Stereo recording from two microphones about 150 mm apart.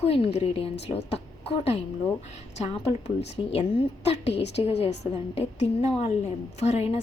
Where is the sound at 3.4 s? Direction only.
30° left (ahead or behind).